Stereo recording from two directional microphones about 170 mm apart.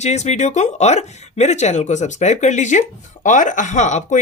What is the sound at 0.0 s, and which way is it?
Speech, 40° left (ahead or behind).